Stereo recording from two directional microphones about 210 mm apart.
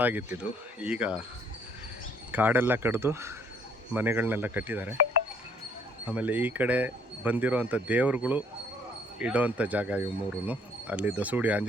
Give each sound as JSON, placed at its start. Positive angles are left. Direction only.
{"t": 0.0, "sound": "speech", "side_deg": -10}
{"t": 2.3, "sound": "speech", "side_deg": -10}
{"t": 6.1, "sound": "speech", "side_deg": -5}